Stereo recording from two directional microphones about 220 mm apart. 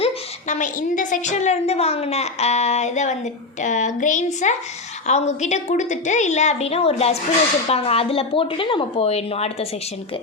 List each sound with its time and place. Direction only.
0.0 s a woman's voice: 30° left (ahead or behind)